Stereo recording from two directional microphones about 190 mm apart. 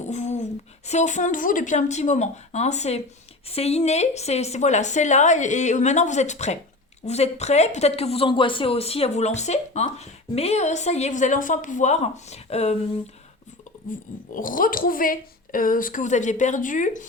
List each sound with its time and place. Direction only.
0.1 s a sound: 35° left (ahead or behind)
0.9 s speech: 40° left (ahead or behind)
14.3 s a woman's voice: 45° left (ahead or behind)